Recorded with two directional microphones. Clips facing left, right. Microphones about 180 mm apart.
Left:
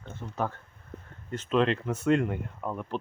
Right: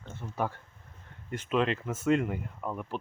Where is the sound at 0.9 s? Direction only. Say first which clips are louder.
Left 17 dB; 70° left (ahead or behind).